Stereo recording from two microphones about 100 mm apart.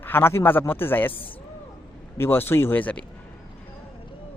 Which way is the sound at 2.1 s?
25° left (ahead or behind).